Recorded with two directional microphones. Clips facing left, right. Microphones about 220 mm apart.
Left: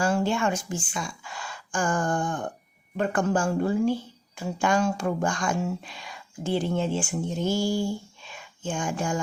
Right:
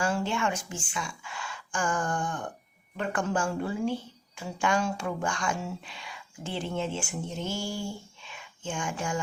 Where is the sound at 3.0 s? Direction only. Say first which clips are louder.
Left 5 dB; 45° left (ahead or behind).